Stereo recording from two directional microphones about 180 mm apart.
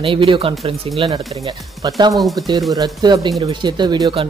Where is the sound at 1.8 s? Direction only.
25° right (ahead or behind).